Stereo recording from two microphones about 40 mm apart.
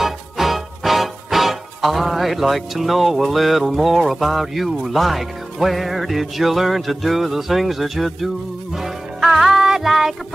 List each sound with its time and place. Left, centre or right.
0.0 s music: centre